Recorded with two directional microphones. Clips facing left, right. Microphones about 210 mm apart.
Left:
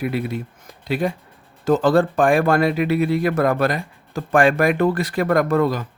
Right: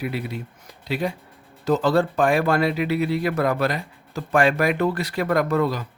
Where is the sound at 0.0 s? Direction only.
50° left (ahead or behind).